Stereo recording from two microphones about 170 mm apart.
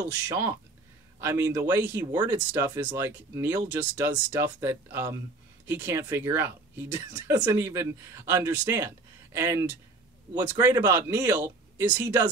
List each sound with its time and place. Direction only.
0.3 s speech: 15° right (ahead or behind)